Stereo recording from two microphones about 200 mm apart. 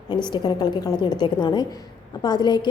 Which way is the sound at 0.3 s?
20° left (ahead or behind).